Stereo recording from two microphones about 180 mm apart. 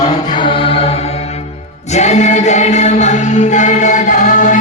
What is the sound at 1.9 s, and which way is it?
Music, 40° left (ahead or behind).